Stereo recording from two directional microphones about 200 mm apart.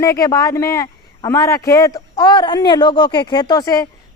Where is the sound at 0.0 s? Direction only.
15° left (ahead or behind).